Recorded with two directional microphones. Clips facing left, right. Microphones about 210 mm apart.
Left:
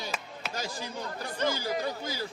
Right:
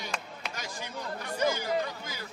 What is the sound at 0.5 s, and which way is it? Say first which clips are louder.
Speech: left 5 dB; 30° left (ahead or behind).